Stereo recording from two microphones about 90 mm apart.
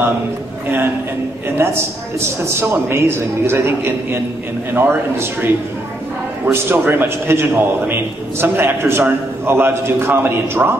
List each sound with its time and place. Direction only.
1.6 s a man's voice: 25° right (ahead or behind)